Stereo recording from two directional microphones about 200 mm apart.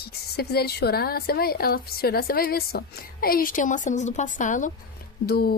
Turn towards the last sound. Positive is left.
turn(degrees=50)  # may be behind; listen again after turning